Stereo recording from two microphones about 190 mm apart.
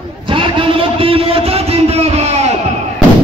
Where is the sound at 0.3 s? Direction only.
25° right (ahead or behind).